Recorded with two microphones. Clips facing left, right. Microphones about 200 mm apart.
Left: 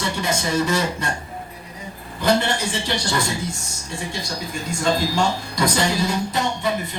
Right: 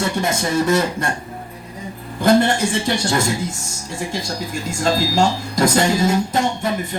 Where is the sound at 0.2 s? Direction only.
55° right (ahead or behind).